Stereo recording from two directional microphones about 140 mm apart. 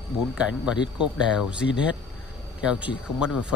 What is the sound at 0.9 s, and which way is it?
Speech, 5° right (ahead or behind).